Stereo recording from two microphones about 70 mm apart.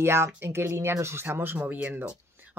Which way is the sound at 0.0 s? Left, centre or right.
Right.